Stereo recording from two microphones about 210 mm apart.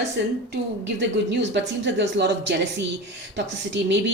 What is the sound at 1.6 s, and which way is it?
Speech, 55° right (ahead or behind).